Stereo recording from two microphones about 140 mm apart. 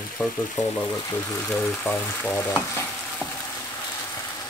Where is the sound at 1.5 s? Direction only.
10° left (ahead or behind).